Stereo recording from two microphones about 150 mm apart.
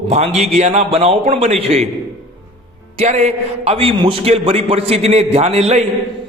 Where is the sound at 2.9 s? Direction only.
50° right (ahead or behind).